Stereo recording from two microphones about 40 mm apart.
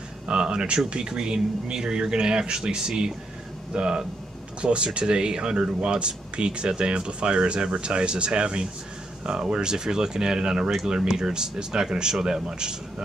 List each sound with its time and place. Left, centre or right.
0.3 s speech: right